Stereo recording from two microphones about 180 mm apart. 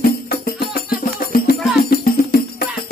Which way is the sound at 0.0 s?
60° left (ahead or behind).